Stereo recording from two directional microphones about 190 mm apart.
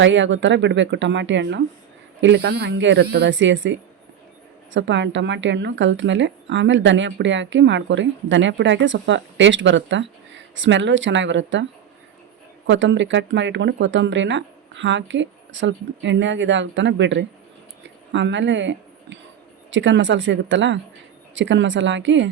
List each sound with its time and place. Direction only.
0.0 s speech: 75° right (ahead or behind)
2.2 s speech: 65° right (ahead or behind)
12.6 s speech: 75° right (ahead or behind)
17.8 s a sound: 70° right (ahead or behind)
19.7 s speech: 75° right (ahead or behind)